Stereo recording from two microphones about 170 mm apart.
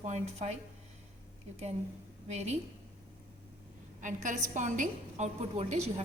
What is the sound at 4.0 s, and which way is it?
A woman's voice, 50° right (ahead or behind).